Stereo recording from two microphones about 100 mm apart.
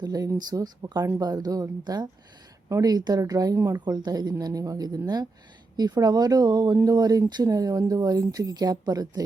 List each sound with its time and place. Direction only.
0.0 s speech: 40° right (ahead or behind)